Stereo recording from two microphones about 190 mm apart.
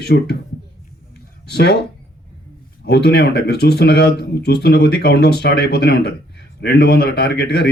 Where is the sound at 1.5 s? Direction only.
60° left (ahead or behind).